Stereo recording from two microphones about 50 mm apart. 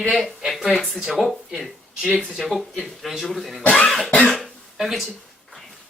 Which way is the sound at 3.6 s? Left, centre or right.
Left.